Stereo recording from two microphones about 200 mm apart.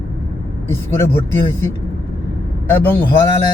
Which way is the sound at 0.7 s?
15° left (ahead or behind).